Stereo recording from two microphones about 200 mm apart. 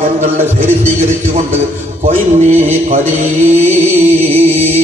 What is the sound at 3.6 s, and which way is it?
Music, 10° right (ahead or behind).